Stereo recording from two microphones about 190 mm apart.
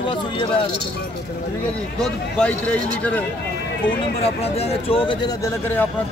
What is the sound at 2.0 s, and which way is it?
A man's voice, 5° left (ahead or behind).